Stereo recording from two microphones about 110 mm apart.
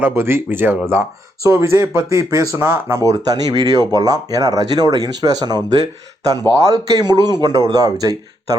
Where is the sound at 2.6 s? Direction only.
20° right (ahead or behind).